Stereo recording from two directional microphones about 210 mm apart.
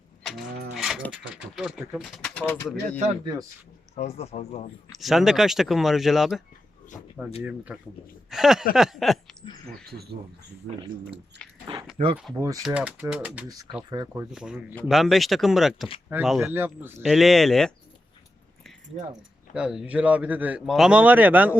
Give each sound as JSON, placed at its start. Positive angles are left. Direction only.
{"t": 0.7, "sound": "speech", "side_deg": 0}
{"t": 3.9, "sound": "speech", "side_deg": 30}
{"t": 4.9, "sound": "speech", "side_deg": 0}
{"t": 7.4, "sound": "speech", "side_deg": -5}
{"t": 9.8, "sound": "speech", "side_deg": -45}
{"t": 10.7, "sound": "speech", "side_deg": -25}
{"t": 11.4, "sound": "chewing", "side_deg": 5}
{"t": 12.0, "sound": "speech", "side_deg": -30}
{"t": 12.6, "sound": "speech", "side_deg": -5}
{"t": 19.5, "sound": "speech", "side_deg": -5}